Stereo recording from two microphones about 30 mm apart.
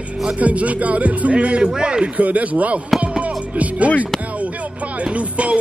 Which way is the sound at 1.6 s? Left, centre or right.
Right.